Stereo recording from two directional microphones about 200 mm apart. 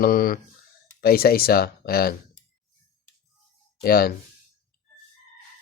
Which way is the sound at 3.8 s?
50° left (ahead or behind).